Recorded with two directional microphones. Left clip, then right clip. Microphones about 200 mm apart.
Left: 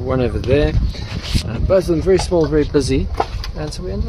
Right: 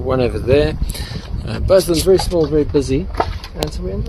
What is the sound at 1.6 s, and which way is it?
Speech, 45° right (ahead or behind).